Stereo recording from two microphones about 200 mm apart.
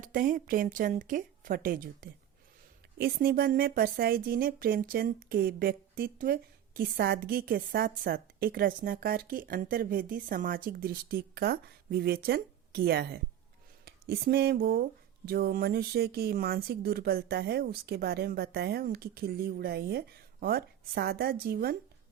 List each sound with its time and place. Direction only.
0.0 s a woman's voice: 40° right (ahead or behind)